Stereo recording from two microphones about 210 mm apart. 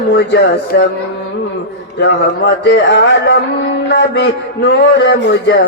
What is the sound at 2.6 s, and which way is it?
A man's voice, 55° left (ahead or behind).